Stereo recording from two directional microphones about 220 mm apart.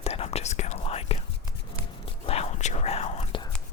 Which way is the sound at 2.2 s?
25° left (ahead or behind).